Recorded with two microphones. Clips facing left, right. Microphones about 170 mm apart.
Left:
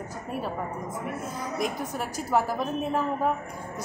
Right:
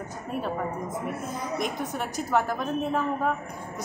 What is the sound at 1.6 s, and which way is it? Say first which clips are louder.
A woman's voice: left 2 dB; 5° left (ahead or behind).